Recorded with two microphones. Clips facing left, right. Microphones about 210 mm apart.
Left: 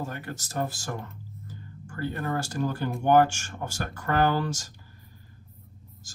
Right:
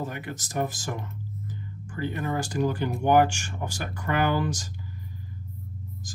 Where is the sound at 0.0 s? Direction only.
15° right (ahead or behind).